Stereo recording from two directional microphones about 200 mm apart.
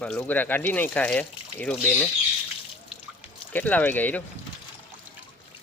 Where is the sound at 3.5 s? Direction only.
10° left (ahead or behind).